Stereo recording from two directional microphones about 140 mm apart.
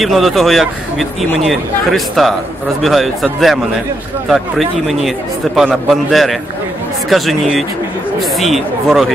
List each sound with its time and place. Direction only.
0.0 s speech: centre (ahead or behind)